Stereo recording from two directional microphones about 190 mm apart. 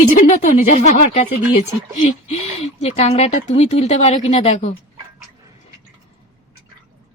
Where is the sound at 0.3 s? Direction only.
40° left (ahead or behind).